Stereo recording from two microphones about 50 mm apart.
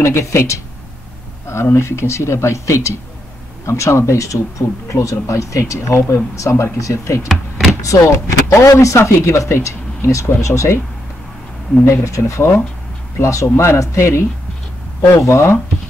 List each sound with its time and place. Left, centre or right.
0.0 s speech: left
1.5 s speech: left
11.8 s speech: left